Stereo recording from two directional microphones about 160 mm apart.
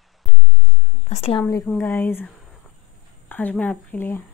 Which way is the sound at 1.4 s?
10° left (ahead or behind).